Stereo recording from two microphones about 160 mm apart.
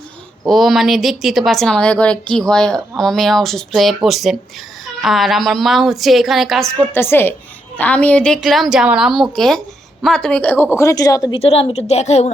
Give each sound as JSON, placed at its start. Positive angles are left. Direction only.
{"t": 0.4, "sound": "speech", "side_deg": 0}
{"t": 6.9, "sound": "a woman's voice", "side_deg": 15}
{"t": 11.3, "sound": "a woman's voice", "side_deg": 35}